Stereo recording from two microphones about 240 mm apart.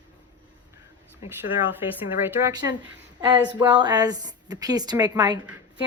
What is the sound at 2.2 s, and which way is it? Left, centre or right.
A woman's voice, centre.